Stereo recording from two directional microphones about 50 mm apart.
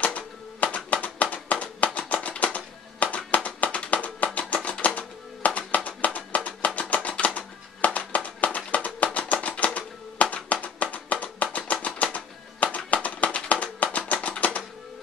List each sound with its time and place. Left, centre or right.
0.0 s typewriter: left
1.0 s a sound: left
2.2 s typewriter: left
3.4 s music: left
11.5 s typewriter: left
12.7 s music: left